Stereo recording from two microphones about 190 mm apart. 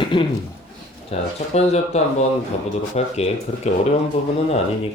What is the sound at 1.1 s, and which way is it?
Speech, 35° left (ahead or behind).